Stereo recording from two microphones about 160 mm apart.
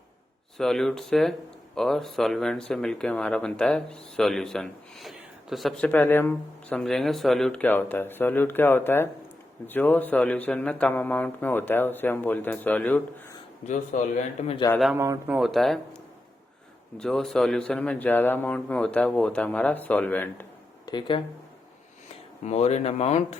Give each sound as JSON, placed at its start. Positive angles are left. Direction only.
{"t": 0.5, "sound": "speech", "side_deg": 0}
{"t": 13.9, "sound": "speech", "side_deg": 50}
{"t": 14.9, "sound": "speech", "side_deg": -15}
{"t": 15.4, "sound": "speech", "side_deg": 0}
{"t": 17.0, "sound": "speech", "side_deg": 5}
{"t": 20.8, "sound": "speech", "side_deg": 30}
{"t": 22.4, "sound": "speech", "side_deg": 45}